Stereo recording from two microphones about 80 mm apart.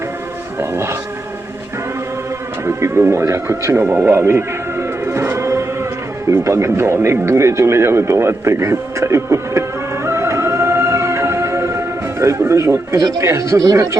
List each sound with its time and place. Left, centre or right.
0.6 s a man's voice: right
2.6 s speech: right
6.2 s radio: right
12.4 s a man's voice: right
13.0 s speech: right
13.2 s a man's voice: right